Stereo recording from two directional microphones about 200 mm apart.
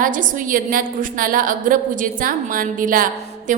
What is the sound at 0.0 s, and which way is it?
A woman's voice, 40° right (ahead or behind).